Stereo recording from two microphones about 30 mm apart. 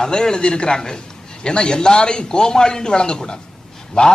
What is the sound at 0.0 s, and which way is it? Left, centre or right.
A man's voice, left.